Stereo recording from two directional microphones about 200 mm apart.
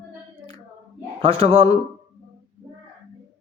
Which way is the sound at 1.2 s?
30° right (ahead or behind).